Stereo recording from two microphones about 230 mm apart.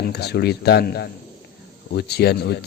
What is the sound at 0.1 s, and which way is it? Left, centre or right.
Speech, left.